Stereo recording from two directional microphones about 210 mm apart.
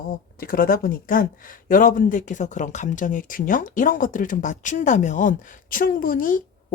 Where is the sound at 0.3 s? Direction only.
45° left (ahead or behind).